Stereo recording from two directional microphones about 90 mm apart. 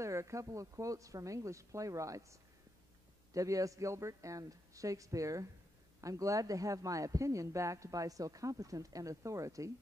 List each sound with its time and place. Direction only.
0.0 s speech: 35° right (ahead or behind)
3.3 s speech: 40° right (ahead or behind)